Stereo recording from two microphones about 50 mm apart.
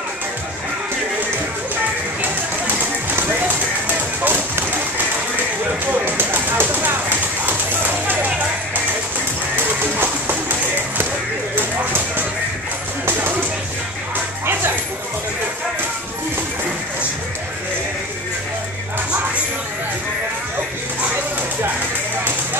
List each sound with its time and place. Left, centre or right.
3.1 s run: right
4.2 s a sound: right
9.6 s music: right
11.5 s clip-clop: right
14.4 s music: right